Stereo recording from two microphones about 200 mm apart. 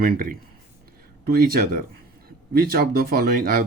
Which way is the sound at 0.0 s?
45° right (ahead or behind).